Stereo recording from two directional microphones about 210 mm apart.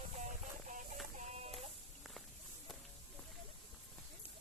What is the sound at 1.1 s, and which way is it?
Chicken, 30° right (ahead or behind).